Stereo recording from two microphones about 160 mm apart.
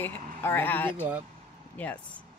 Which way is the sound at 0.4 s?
15° left (ahead or behind).